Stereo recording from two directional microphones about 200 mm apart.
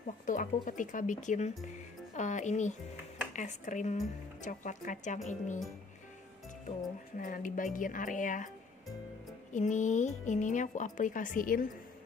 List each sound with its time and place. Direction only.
0.3 s speech: 40° left (ahead or behind)
7.2 s speech: 40° left (ahead or behind)
9.5 s speech: 40° left (ahead or behind)